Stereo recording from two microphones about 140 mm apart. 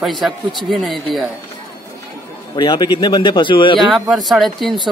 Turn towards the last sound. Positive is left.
turn(degrees=0)  # may be behind; listen again after turning